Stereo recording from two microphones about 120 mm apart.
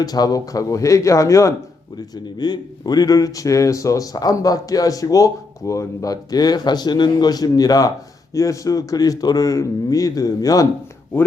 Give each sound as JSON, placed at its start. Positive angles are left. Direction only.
{"t": 0.0, "sound": "speech", "side_deg": 30}